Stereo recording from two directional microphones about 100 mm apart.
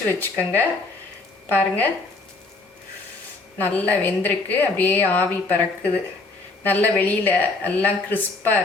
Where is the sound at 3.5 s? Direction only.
20° left (ahead or behind).